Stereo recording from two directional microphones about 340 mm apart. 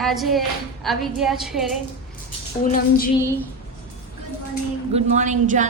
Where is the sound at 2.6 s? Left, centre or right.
Left.